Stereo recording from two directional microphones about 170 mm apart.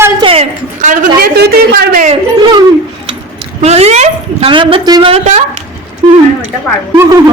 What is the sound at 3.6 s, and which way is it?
A woman's voice, 40° right (ahead or behind).